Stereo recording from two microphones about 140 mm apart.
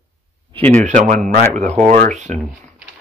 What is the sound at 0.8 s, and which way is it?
Speech, 65° right (ahead or behind).